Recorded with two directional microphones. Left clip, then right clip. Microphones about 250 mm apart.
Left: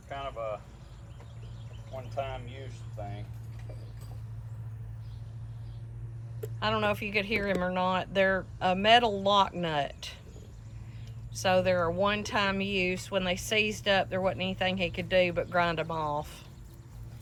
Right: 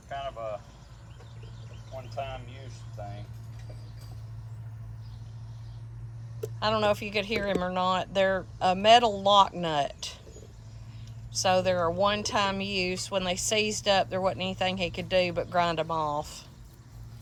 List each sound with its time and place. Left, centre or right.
0.1 s vehicle: left
2.1 s vehicle: left
6.6 s speech: centre
11.3 s speech: centre